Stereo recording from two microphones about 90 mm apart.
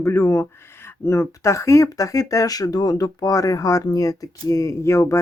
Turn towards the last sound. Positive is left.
turn(degrees=35)  # may be behind; listen again after turning